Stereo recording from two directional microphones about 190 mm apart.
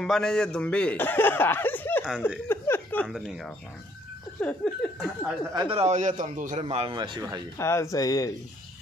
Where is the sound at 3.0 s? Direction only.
Centre (ahead or behind).